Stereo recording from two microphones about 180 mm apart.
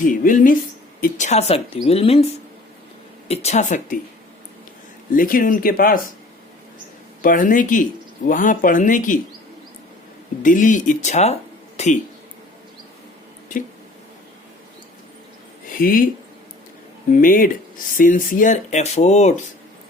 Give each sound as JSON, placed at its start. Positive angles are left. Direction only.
{"t": 0.0, "sound": "speech", "side_deg": 45}
{"t": 1.2, "sound": "a woman's voice", "side_deg": 35}
{"t": 3.2, "sound": "a woman's voice", "side_deg": 35}
{"t": 5.1, "sound": "speech", "side_deg": 50}
{"t": 7.2, "sound": "speech", "side_deg": 50}
{"t": 10.4, "sound": "speech", "side_deg": 45}
{"t": 15.7, "sound": "speech", "side_deg": 50}
{"t": 17.1, "sound": "speech", "side_deg": 50}